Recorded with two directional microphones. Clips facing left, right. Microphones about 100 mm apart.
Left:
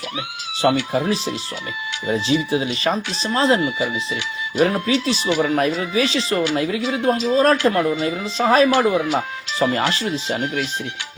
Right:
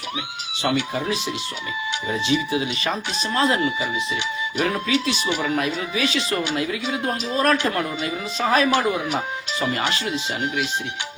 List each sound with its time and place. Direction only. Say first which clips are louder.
0.6 s speech: left 5 dB; 35° left (ahead or behind)
4.6 s speech: left 5 dB; 35° left (ahead or behind)